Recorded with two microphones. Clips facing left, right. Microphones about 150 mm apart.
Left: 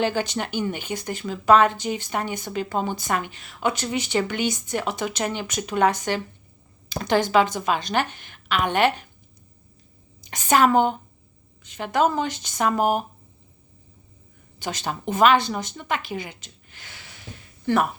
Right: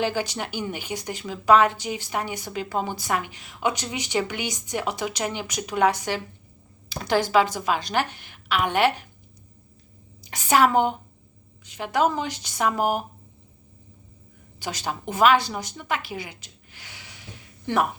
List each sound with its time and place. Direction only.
0.0 s a woman's voice: 10° right (ahead or behind)
7.5 s a woman's voice: 10° right (ahead or behind)
10.2 s a woman's voice: 10° right (ahead or behind)
14.8 s a woman's voice: 10° right (ahead or behind)